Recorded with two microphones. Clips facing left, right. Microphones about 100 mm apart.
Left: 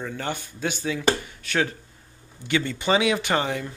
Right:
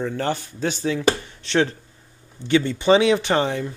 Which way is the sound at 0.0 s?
35° right (ahead or behind).